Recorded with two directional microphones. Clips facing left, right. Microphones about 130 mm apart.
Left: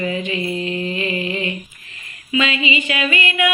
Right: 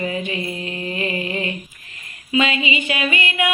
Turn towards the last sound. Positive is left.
turn(degrees=-30)  # may be behind; listen again after turning